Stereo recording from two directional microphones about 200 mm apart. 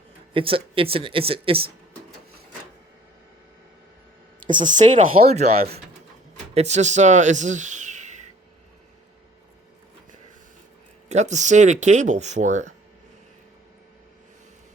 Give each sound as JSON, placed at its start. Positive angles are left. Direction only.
{"t": 0.3, "sound": "speech", "side_deg": -25}
{"t": 4.6, "sound": "speech", "side_deg": -40}
{"t": 11.1, "sound": "speech", "side_deg": -35}